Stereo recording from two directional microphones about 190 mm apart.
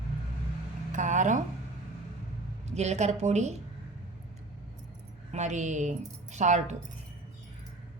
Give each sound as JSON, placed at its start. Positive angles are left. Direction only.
{"t": 0.9, "sound": "speech", "side_deg": -40}
{"t": 2.6, "sound": "a woman's voice", "side_deg": -35}
{"t": 5.3, "sound": "a woman's voice", "side_deg": -40}